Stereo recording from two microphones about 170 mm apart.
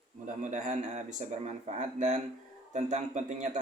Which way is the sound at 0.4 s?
45° right (ahead or behind).